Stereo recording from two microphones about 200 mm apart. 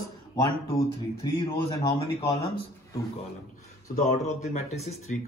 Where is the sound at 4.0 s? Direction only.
35° left (ahead or behind).